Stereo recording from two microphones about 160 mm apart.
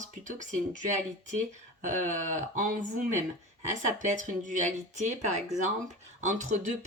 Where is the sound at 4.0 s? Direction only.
50° right (ahead or behind).